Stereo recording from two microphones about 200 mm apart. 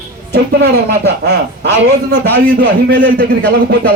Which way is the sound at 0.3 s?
50° right (ahead or behind).